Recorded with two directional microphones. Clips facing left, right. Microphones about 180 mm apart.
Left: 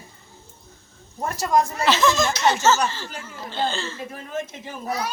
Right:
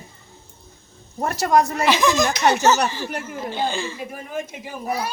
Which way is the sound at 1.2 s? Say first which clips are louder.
Right 3 dB; 70° right (ahead or behind).